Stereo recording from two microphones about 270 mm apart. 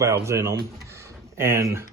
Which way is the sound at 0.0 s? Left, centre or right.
Centre.